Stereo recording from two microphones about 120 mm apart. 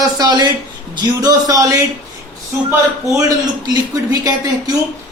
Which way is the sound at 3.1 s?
25° right (ahead or behind).